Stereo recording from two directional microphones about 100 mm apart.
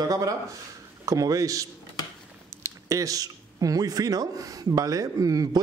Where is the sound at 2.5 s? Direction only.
30° right (ahead or behind).